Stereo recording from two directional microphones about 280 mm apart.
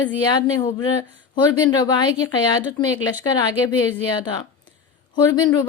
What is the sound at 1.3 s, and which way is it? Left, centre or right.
A woman's voice, centre.